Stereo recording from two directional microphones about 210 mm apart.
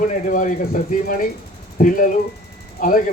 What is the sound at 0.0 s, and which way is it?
Speech, 40° left (ahead or behind).